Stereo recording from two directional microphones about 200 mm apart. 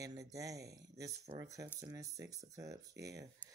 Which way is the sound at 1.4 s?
15° right (ahead or behind).